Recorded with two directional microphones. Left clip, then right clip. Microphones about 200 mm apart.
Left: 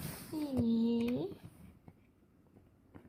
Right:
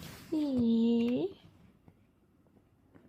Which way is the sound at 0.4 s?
10° right (ahead or behind).